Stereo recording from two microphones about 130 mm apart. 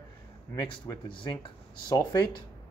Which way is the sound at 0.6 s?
35° left (ahead or behind).